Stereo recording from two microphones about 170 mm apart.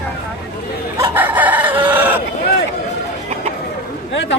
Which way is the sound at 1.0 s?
10° right (ahead or behind).